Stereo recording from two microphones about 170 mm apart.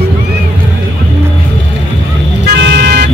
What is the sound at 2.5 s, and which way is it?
Vehicle, 90° right.